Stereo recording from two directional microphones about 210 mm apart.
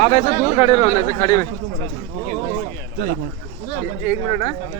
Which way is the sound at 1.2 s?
15° left (ahead or behind).